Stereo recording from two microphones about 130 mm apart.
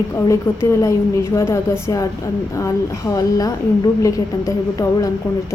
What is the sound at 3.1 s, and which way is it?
Speech, 30° left (ahead or behind).